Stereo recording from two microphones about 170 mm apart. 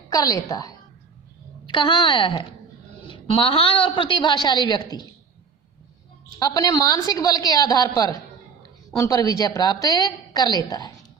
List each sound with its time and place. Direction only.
0.1 s a woman's voice: 20° left (ahead or behind)
6.4 s a woman's voice: 20° left (ahead or behind)